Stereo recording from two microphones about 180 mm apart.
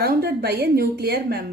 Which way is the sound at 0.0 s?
60° right (ahead or behind).